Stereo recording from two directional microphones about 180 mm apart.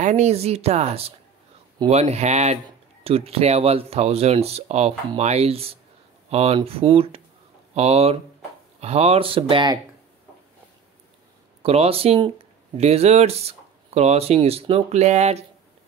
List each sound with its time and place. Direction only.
0.0 s speech: 40° right (ahead or behind)
11.6 s speech: 35° right (ahead or behind)